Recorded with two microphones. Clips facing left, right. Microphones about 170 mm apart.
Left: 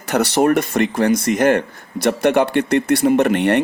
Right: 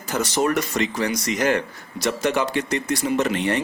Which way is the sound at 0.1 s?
65° left (ahead or behind).